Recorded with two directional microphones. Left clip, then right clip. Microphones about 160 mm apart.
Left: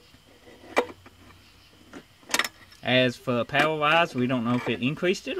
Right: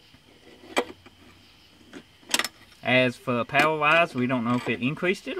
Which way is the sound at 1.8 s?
20° right (ahead or behind).